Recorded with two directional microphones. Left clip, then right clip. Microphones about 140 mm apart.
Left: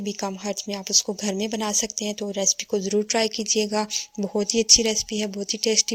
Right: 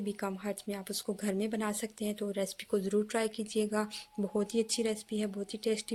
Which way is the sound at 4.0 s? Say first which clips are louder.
Left 9 dB; 35° left (ahead or behind).